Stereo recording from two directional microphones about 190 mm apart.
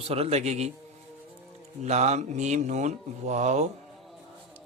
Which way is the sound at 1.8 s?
35° right (ahead or behind).